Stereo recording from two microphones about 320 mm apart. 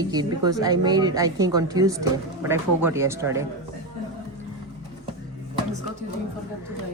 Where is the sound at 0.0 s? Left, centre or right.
Centre.